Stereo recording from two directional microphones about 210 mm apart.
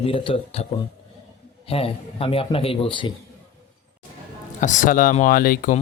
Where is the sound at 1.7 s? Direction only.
25° left (ahead or behind).